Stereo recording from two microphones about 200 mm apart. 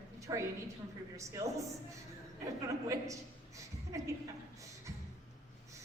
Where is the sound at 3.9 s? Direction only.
15° right (ahead or behind).